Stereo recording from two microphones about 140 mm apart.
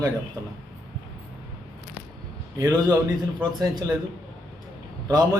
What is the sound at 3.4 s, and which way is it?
Speech, 30° right (ahead or behind).